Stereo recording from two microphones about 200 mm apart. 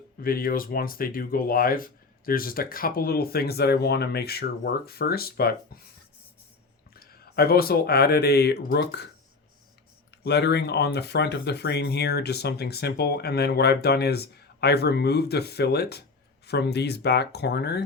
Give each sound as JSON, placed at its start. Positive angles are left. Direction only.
{"t": 0.2, "sound": "speech", "side_deg": 45}
{"t": 6.9, "sound": "speech", "side_deg": 50}
{"t": 10.2, "sound": "speech", "side_deg": 55}